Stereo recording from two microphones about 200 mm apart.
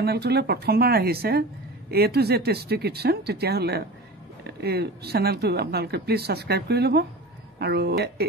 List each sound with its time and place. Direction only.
0.0 s speech: 55° right (ahead or behind)